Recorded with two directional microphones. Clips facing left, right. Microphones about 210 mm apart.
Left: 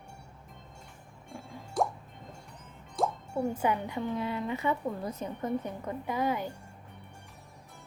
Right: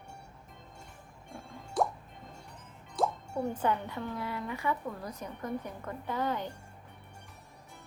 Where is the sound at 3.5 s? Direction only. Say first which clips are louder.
Left 2 dB; 10° left (ahead or behind).